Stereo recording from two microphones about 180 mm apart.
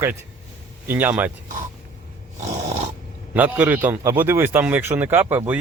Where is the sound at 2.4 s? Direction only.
40° right (ahead or behind).